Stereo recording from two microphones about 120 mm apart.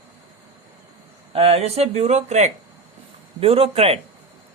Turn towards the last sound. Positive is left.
turn(degrees=-55)  # may be behind; listen again after turning